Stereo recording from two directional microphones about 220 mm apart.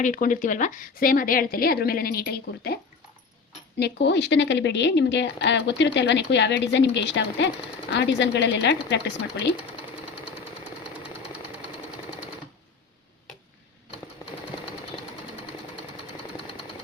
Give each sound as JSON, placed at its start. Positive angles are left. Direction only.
{"t": 0.0, "sound": "a woman's voice", "side_deg": 35}
{"t": 3.8, "sound": "speech", "side_deg": 50}